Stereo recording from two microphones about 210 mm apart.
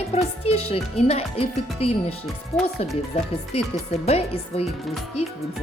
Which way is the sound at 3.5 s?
30° left (ahead or behind).